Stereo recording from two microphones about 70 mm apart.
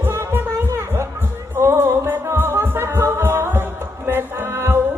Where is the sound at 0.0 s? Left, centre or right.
Right.